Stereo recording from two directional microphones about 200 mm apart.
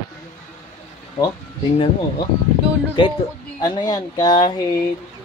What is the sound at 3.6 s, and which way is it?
Speech, 20° left (ahead or behind).